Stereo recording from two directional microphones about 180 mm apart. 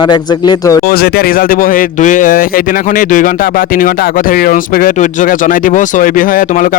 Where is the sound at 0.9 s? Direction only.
60° left (ahead or behind).